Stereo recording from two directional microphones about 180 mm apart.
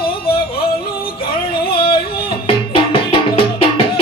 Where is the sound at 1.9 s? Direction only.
55° left (ahead or behind).